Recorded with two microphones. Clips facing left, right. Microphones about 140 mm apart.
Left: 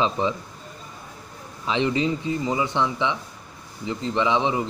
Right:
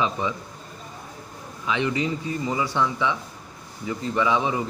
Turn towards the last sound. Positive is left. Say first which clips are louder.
# left 1 dB
turn(degrees=20)  # may be behind; listen again after turning